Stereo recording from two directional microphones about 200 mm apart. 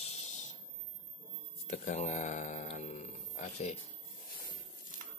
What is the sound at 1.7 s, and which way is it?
Grunt, 40° left (ahead or behind).